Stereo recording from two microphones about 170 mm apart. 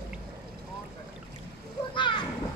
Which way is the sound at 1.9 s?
25° left (ahead or behind).